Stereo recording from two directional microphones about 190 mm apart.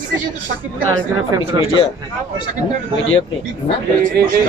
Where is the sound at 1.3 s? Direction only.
15° right (ahead or behind).